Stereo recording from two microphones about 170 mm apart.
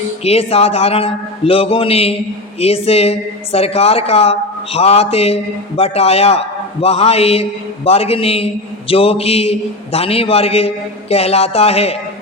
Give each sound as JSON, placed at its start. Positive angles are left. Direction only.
{"t": 0.3, "sound": "a woman's voice", "side_deg": 35}